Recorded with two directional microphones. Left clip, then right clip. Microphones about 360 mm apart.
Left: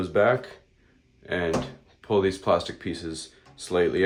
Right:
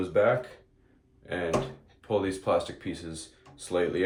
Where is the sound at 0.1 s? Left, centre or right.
Left.